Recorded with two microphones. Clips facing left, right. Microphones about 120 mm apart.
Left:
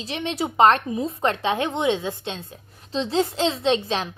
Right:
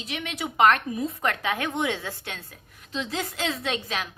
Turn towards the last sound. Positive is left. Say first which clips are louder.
# left 8 dB
turn(degrees=30)  # may be behind; listen again after turning